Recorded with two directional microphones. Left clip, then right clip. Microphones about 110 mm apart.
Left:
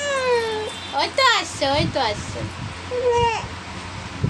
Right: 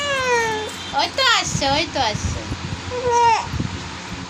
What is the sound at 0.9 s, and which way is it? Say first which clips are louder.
A child's voice: right 1 dB; 45° left (ahead or behind).